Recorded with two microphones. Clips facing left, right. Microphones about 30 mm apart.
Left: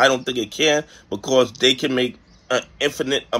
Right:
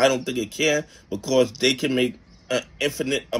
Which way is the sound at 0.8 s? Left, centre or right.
Left.